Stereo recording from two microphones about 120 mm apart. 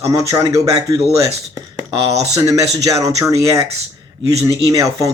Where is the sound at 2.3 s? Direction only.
30° right (ahead or behind).